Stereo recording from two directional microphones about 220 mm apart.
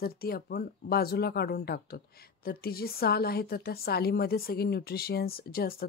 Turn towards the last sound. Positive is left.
turn(degrees=45)  # may be behind; listen again after turning